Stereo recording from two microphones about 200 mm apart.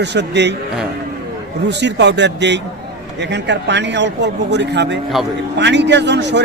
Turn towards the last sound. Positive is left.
turn(degrees=-60)  # may be behind; listen again after turning